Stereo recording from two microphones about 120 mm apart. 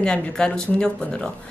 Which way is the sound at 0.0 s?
5° left (ahead or behind).